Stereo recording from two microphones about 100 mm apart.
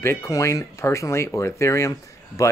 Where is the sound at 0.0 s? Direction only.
25° left (ahead or behind).